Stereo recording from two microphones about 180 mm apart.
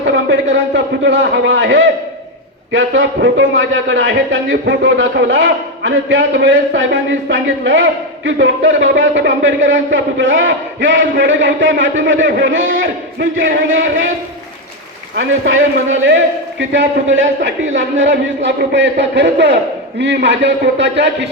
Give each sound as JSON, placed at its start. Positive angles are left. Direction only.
{"t": 0.1, "sound": "a man's voice", "side_deg": -85}
{"t": 15.1, "sound": "a man's voice", "side_deg": -85}